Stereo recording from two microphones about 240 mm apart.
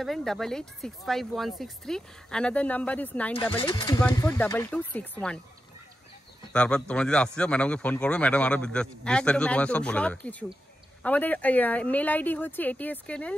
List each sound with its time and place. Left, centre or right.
0.0 s a man's voice: centre
3.5 s speech: centre
6.5 s a man's voice: centre